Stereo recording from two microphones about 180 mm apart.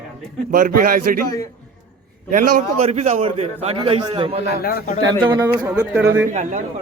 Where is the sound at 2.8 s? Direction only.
40° right (ahead or behind).